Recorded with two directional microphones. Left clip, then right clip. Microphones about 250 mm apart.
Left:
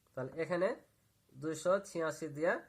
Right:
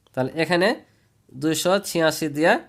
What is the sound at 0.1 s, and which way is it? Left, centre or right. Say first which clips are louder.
A man's voice: right 15 dB; right.